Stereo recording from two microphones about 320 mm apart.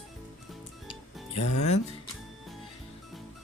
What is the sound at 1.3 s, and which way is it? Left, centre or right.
Speech, left.